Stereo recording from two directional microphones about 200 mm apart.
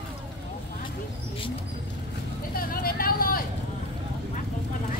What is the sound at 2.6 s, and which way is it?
Vehicle, 45° left (ahead or behind).